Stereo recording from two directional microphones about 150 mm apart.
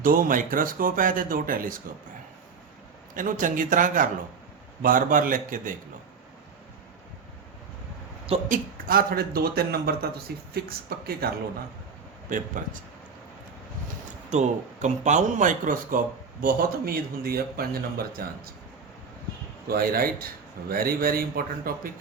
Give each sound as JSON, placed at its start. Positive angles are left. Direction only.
{"t": 0.0, "sound": "speech", "side_deg": -70}
{"t": 3.2, "sound": "a man's voice", "side_deg": -60}
{"t": 8.4, "sound": "a man's voice", "side_deg": -75}
{"t": 12.3, "sound": "a man's voice", "side_deg": -60}
{"t": 14.3, "sound": "speech", "side_deg": -50}
{"t": 16.4, "sound": "a man's voice", "side_deg": -75}
{"t": 19.6, "sound": "a man's voice", "side_deg": -80}